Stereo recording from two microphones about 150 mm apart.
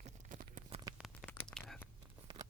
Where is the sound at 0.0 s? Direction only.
60° right (ahead or behind).